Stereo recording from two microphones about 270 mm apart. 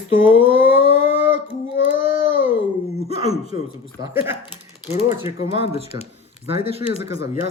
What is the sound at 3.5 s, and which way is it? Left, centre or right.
Speech, centre.